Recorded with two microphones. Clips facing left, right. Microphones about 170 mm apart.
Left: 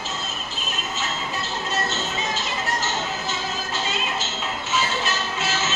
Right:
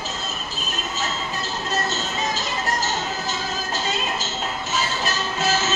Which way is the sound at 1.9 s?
40° right (ahead or behind).